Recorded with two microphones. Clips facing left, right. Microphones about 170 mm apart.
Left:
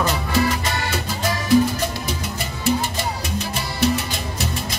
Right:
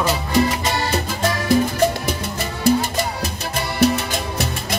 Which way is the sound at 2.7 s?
40° right (ahead or behind).